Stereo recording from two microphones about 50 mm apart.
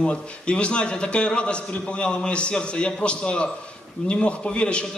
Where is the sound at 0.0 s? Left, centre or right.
Left.